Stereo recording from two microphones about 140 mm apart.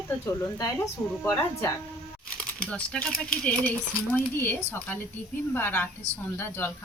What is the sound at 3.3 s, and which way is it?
Speech, 10° left (ahead or behind).